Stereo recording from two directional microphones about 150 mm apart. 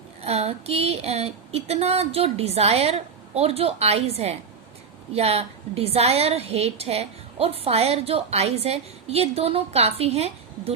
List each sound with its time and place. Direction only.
0.2 s a woman's voice: 45° right (ahead or behind)